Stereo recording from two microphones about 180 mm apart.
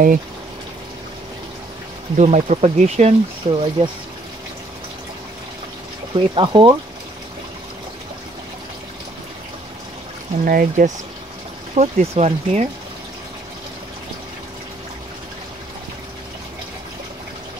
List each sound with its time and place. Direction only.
2.1 s speech: 40° right (ahead or behind)
6.1 s speech: 25° right (ahead or behind)
10.4 s speech: 50° right (ahead or behind)
11.7 s speech: 35° right (ahead or behind)